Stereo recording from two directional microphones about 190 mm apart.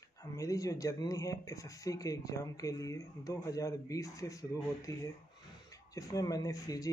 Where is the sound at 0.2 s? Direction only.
15° left (ahead or behind).